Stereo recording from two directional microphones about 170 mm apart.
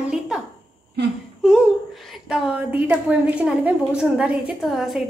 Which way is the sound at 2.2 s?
5° right (ahead or behind).